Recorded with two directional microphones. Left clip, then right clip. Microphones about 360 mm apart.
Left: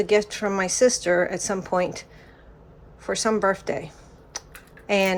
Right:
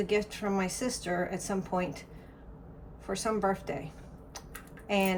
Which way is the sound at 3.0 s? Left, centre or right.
Centre.